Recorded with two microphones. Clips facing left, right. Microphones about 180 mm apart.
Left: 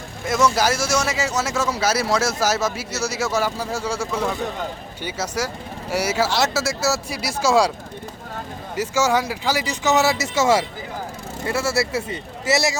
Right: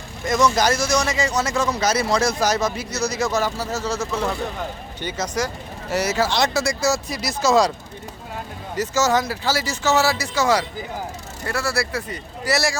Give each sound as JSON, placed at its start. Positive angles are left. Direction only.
{"t": 0.3, "sound": "speech", "side_deg": 5}
{"t": 8.7, "sound": "speech", "side_deg": 10}